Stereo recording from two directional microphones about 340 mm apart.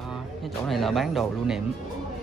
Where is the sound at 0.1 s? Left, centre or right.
Centre.